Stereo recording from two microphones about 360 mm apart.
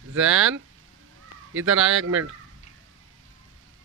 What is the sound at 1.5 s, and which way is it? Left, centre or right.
Speech, right.